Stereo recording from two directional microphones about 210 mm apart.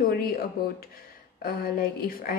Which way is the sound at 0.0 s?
45° left (ahead or behind).